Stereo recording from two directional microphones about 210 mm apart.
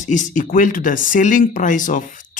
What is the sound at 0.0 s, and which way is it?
Speech, 35° left (ahead or behind).